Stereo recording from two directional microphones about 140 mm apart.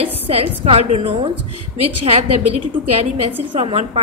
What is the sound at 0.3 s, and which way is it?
A woman's voice, 45° right (ahead or behind).